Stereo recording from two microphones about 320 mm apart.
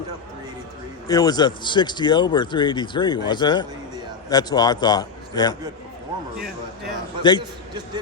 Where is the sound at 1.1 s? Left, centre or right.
Centre.